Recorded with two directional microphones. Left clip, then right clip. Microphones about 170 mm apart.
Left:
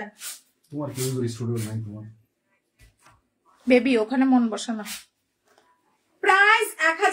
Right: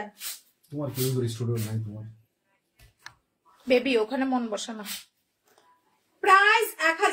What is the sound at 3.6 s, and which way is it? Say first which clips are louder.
A woman's voice: left 3 dB; 30° left (ahead or behind).